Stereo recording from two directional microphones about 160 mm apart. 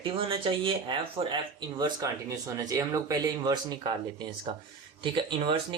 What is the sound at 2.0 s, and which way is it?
Speech, 20° right (ahead or behind).